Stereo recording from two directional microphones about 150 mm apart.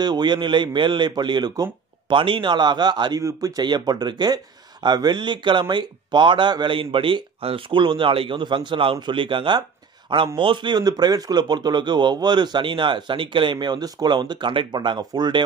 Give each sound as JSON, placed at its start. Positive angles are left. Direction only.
{"t": 0.0, "sound": "a man's voice", "side_deg": -30}